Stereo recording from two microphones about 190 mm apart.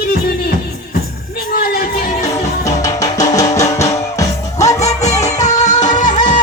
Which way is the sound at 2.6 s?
20° left (ahead or behind).